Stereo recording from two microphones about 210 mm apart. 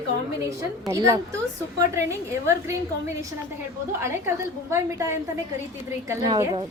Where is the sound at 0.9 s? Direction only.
15° right (ahead or behind).